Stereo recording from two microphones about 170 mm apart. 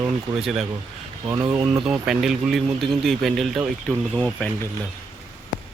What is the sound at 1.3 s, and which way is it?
Speech, 15° right (ahead or behind).